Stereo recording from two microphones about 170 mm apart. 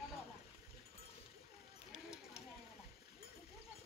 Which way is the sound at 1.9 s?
5° right (ahead or behind).